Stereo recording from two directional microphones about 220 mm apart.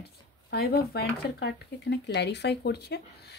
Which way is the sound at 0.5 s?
45° left (ahead or behind).